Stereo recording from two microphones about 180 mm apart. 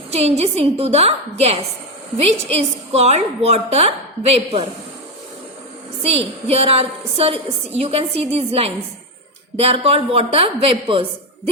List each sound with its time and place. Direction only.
0.1 s a woman's voice: 35° right (ahead or behind)
6.0 s a woman's voice: 35° right (ahead or behind)